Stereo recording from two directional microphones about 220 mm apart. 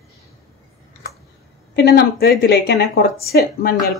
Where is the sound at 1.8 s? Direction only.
45° left (ahead or behind).